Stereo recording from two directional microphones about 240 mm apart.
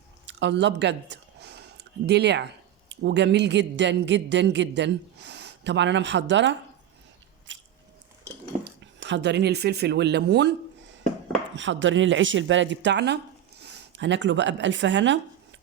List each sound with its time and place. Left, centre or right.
0.3 s a sound: right
2.9 s a man's voice: right
7.5 s biting: right
8.6 s speech: right
11.5 s a man's voice: right